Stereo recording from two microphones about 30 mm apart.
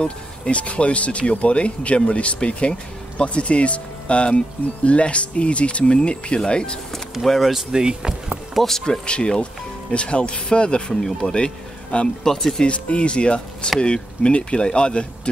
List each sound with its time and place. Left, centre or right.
0.0 s speech: left
7.2 s speech: centre
7.5 s speech: right
8.6 s speech: centre
9.0 s speech: left
11.0 s speech: centre
11.3 s speech: left
12.2 s speech: centre
12.6 s speech: left